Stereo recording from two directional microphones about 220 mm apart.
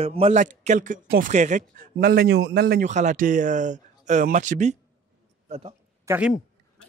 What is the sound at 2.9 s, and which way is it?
A man's voice, 35° right (ahead or behind).